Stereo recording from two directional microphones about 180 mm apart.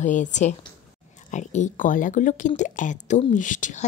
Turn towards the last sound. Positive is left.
turn(degrees=45)  # may be behind; listen again after turning